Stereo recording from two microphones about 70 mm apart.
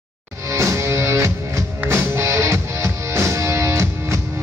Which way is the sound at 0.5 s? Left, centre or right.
Right.